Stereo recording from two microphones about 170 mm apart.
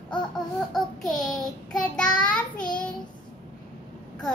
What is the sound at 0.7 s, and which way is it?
Child singing, centre (ahead or behind).